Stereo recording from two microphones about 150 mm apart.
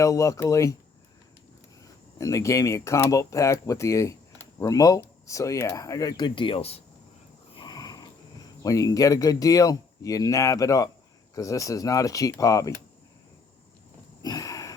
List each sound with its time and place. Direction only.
0.0 s speech: 20° left (ahead or behind)
1.8 s speech: 20° left (ahead or behind); by 6.8 s 40° left (ahead or behind)
7.5 s a sound: 30° left (ahead or behind)
8.6 s speech: 25° left (ahead or behind)
14.2 s sniff: 25° left (ahead or behind)